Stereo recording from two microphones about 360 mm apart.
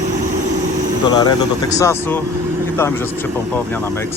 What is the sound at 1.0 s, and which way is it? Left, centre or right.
Speech, centre.